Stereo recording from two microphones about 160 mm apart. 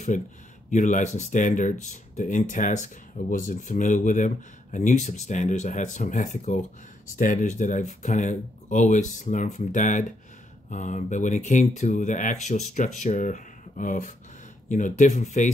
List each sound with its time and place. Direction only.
0.1 s speech: 50° left (ahead or behind)